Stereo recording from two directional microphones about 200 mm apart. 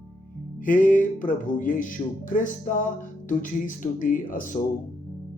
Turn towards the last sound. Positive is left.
turn(degrees=40)  # may be behind; listen again after turning